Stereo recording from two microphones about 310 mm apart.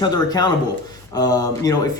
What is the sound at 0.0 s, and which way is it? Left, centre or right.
Speech, centre.